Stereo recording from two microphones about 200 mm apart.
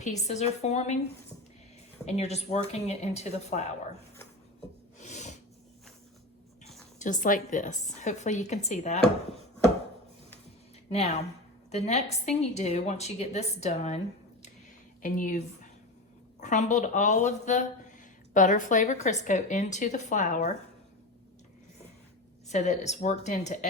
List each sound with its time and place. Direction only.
0.0 s a woman's voice: 35° left (ahead or behind)
2.0 s a woman's voice: 30° left (ahead or behind)
4.9 s snort: 35° left (ahead or behind)
7.0 s a woman's voice: 40° left (ahead or behind)
10.9 s a woman's voice: 35° left (ahead or behind)
15.0 s a woman's voice: 40° left (ahead or behind)
22.4 s a woman's voice: 35° left (ahead or behind)